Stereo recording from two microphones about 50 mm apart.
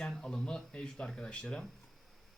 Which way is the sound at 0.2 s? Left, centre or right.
Centre.